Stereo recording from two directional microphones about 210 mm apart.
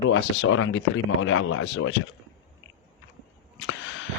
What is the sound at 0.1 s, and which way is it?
Speech, 70° left (ahead or behind).